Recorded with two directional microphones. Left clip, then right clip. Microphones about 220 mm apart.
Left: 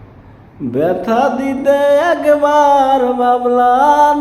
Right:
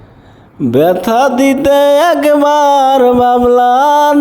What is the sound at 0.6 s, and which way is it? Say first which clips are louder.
Music: right 6 dB; 50° right (ahead or behind).